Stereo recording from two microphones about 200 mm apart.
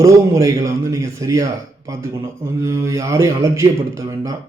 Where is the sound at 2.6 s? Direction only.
15° right (ahead or behind).